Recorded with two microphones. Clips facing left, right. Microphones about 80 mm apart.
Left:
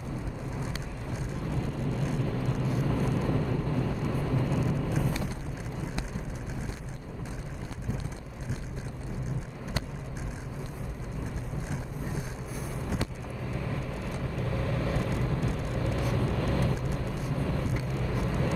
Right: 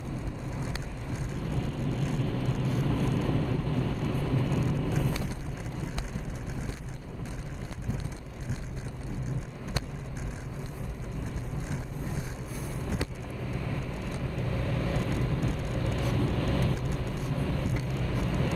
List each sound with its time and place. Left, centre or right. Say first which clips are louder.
1.5 s vehicle: even; centre
14.4 s vehicle: left 1 dB; centre